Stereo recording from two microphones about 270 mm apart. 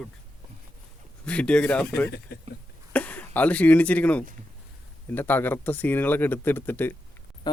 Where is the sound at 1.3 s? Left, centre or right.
Centre.